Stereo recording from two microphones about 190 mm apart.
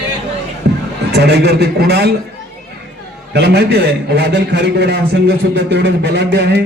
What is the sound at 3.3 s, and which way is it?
A man's voice, 60° right (ahead or behind).